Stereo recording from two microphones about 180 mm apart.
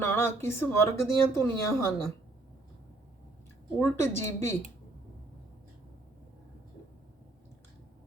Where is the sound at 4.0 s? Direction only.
15° left (ahead or behind).